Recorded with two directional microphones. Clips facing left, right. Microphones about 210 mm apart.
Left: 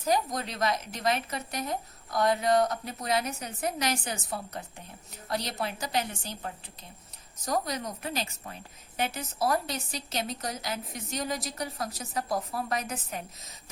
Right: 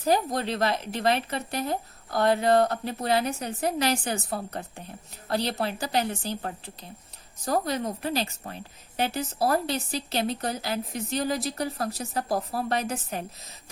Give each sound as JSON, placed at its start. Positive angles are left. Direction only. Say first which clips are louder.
{"t": 0.0, "sound": "a woman's voice", "louder": "right 4 dB", "side_deg": -30}
{"t": 5.3, "sound": "a woman's voice", "louder": "right 5 dB", "side_deg": -30}
{"t": 7.4, "sound": "a woman's voice", "louder": "right 4 dB", "side_deg": -35}